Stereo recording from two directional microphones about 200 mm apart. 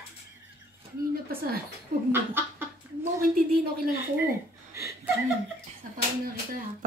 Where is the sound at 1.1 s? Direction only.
50° right (ahead or behind).